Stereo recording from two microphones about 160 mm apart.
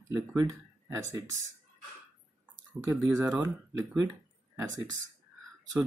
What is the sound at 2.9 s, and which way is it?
Speech, 15° right (ahead or behind).